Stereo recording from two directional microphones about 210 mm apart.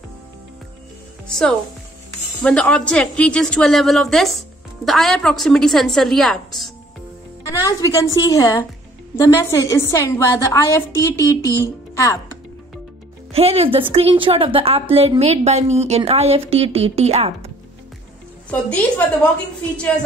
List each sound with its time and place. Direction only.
1.2 s a woman's voice: centre (ahead or behind)
7.4 s a woman's voice: 15° left (ahead or behind)
13.3 s a woman's voice: 30° right (ahead or behind)
18.5 s a woman's voice: 5° left (ahead or behind)